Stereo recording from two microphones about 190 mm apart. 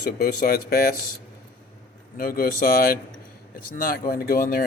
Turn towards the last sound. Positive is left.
turn(degrees=50)  # may be behind; listen again after turning